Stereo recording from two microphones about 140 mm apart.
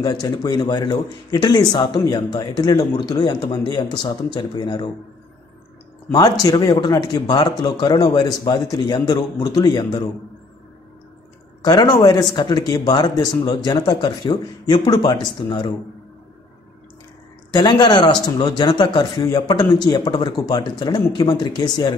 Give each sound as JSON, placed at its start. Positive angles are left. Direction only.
{"t": 0.0, "sound": "a man's voice", "side_deg": 30}
{"t": 6.4, "sound": "speech", "side_deg": 25}
{"t": 11.6, "sound": "a man's voice", "side_deg": 30}
{"t": 17.6, "sound": "a man's voice", "side_deg": 30}